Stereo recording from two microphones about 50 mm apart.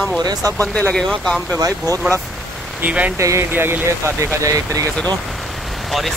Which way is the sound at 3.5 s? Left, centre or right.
Right.